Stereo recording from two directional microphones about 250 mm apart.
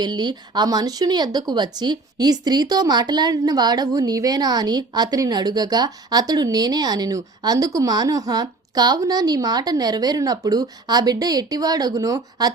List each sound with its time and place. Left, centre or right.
0.0 s speech: centre